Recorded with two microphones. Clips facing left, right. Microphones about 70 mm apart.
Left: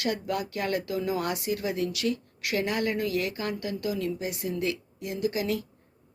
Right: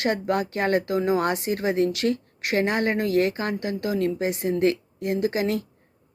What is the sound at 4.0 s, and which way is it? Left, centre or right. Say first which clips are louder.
Speech: right 7 dB; right.